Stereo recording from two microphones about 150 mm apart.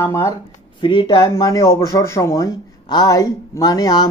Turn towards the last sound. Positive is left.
turn(degrees=25)  # may be behind; listen again after turning